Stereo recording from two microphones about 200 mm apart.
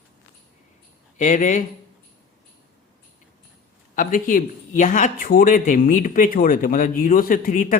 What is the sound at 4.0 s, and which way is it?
Speech, 40° left (ahead or behind).